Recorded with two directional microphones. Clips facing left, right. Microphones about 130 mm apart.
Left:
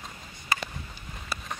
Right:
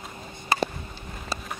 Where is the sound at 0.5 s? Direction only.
30° right (ahead or behind).